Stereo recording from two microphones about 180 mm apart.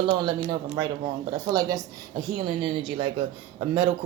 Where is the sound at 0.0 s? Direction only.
25° right (ahead or behind).